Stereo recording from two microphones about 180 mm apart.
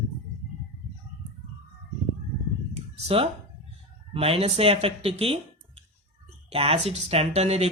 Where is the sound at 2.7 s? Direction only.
35° right (ahead or behind).